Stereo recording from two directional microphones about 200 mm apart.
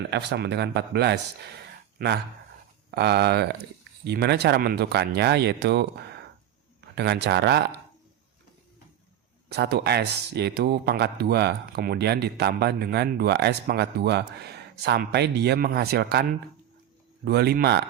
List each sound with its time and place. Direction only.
0.1 s speech: 60° right (ahead or behind)
9.5 s speech: 55° right (ahead or behind)
17.2 s speech: 50° right (ahead or behind)